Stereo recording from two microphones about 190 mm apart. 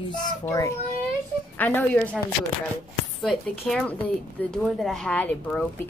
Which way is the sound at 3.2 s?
Centre (ahead or behind).